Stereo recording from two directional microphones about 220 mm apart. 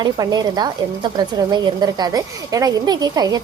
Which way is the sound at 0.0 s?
20° right (ahead or behind).